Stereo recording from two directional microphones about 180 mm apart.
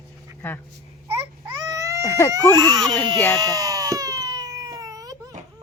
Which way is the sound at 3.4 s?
20° right (ahead or behind).